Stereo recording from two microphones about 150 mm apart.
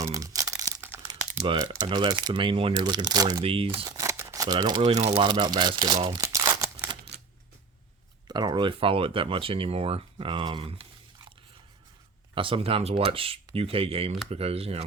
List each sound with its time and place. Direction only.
0.0 s crumpling: 25° right (ahead or behind)
1.5 s speech: 30° right (ahead or behind)
3.4 s speech: 40° right (ahead or behind)
3.8 s scissors: 20° right (ahead or behind)
4.8 s speech: 45° right (ahead or behind)
5.1 s speech: 35° right (ahead or behind)
6.2 s crumpling: 20° right (ahead or behind)
8.3 s speech: 30° right (ahead or behind)
12.3 s speech: 35° right (ahead or behind)